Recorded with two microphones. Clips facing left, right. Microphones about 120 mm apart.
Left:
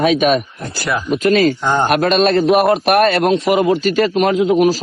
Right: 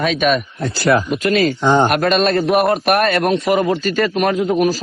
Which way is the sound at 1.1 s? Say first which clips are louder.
Left 3 dB; 40° left (ahead or behind).